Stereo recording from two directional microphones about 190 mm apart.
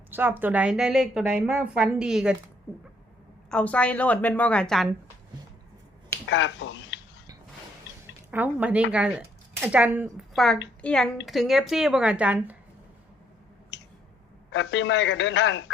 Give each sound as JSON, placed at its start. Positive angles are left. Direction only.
{"t": 0.1, "sound": "a woman's voice", "side_deg": -10}
{"t": 3.5, "sound": "a woman's voice", "side_deg": 5}
{"t": 6.2, "sound": "speech", "side_deg": 75}
{"t": 8.3, "sound": "a woman's voice", "side_deg": -10}
{"t": 13.7, "sound": "a sound", "side_deg": 65}
{"t": 14.5, "sound": "speech", "side_deg": 70}